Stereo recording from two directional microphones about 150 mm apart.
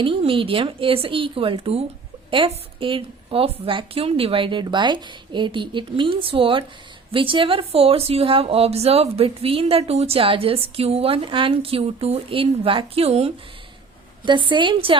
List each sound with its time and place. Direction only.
0.0 s a woman's voice: 35° right (ahead or behind)